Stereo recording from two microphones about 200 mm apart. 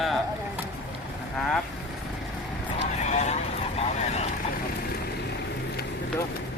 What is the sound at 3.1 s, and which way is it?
Speech, 35° left (ahead or behind).